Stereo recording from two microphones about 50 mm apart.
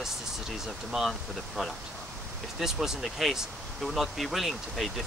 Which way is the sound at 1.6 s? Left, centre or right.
Centre.